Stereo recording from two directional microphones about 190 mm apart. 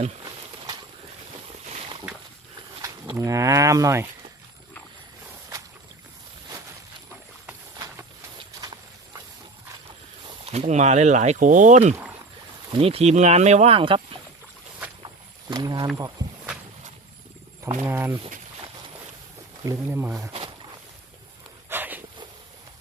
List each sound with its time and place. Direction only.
2.8 s speech: 15° right (ahead or behind)
7.8 s clip-clop: 20° right (ahead or behind)
10.2 s speech: 30° right (ahead or behind)
15.0 s a sound: 20° right (ahead or behind)
17.7 s speech: 15° right (ahead or behind)
19.6 s speech: 15° right (ahead or behind)
21.7 s a sound: 10° right (ahead or behind)